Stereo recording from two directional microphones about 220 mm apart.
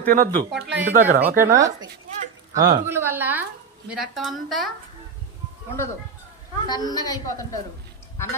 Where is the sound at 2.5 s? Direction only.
20° right (ahead or behind).